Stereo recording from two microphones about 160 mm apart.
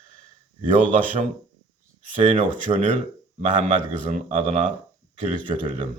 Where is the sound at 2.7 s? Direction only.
40° right (ahead or behind).